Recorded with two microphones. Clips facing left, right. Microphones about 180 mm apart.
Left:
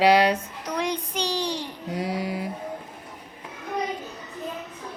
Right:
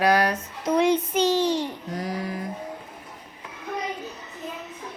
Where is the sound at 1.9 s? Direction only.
75° left (ahead or behind).